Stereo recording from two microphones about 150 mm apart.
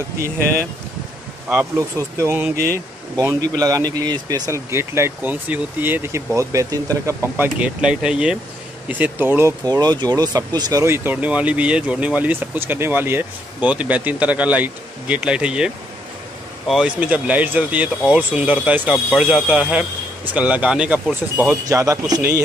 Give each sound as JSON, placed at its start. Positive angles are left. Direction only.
{"t": 1.8, "sound": "speech", "side_deg": -20}
{"t": 7.3, "sound": "speech", "side_deg": -10}
{"t": 21.4, "sound": "speech", "side_deg": -20}